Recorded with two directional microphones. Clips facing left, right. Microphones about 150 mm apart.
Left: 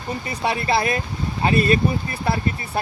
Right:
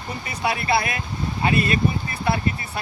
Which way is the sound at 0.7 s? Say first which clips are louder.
Left 2 dB; 30° left (ahead or behind).